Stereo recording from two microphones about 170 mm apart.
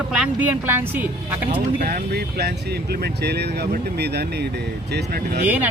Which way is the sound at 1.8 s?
55° right (ahead or behind).